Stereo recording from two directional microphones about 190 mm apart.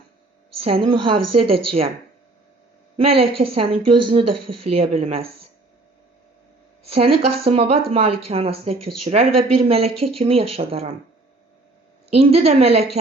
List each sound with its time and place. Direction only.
0.6 s a woman's voice: 30° right (ahead or behind)
3.0 s speech: 30° right (ahead or behind)
6.9 s speech: 30° right (ahead or behind)
12.1 s speech: 35° right (ahead or behind)